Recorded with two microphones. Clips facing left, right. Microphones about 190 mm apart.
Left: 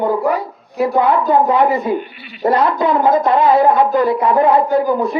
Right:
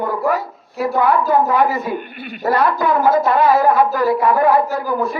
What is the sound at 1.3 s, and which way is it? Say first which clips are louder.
A woman's voice: left 2 dB; 20° left (ahead or behind).